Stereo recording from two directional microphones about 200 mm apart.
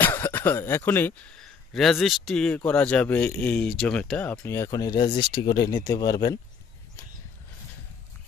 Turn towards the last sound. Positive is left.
turn(degrees=20)  # may be behind; listen again after turning